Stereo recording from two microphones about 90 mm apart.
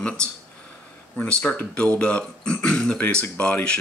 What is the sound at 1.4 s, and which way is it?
Speech, 15° left (ahead or behind).